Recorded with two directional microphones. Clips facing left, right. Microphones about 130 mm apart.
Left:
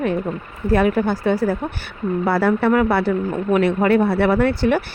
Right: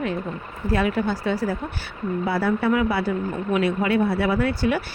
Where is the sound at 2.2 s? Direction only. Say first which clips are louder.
Left 5 dB; 85° left.